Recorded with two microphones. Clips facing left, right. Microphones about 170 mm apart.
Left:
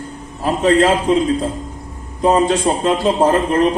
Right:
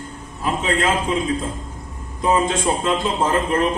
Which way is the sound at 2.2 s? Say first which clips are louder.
Left 5 dB; 35° left (ahead or behind).